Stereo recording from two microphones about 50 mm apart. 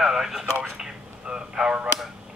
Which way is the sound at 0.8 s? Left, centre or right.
Centre.